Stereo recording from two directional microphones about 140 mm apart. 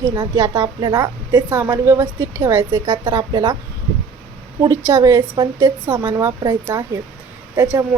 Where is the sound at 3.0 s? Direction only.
30° right (ahead or behind).